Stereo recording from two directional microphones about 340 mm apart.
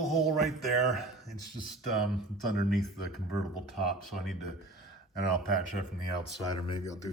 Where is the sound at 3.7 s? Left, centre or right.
Centre.